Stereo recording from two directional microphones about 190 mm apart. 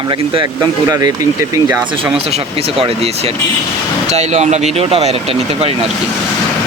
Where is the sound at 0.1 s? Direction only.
20° right (ahead or behind).